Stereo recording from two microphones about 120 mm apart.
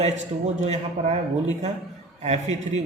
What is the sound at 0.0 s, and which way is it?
Speech, 75° right (ahead or behind).